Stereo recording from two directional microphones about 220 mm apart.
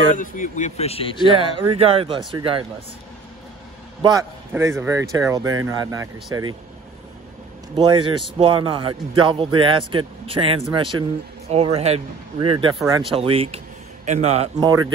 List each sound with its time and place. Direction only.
0.1 s speech: 35° left (ahead or behind)
1.3 s speech: 20° right (ahead or behind)
4.0 s speech: 15° right (ahead or behind)
7.7 s speech: 20° right (ahead or behind)
13.2 s speech: 25° right (ahead or behind)